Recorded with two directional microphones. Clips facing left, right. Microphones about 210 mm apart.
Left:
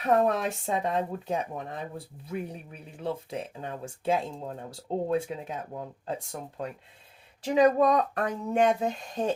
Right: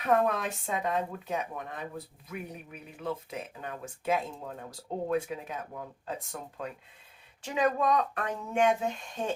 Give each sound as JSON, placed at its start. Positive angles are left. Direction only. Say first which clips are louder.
{"t": 0.0, "sound": "speech", "louder": "left 3 dB", "side_deg": 30}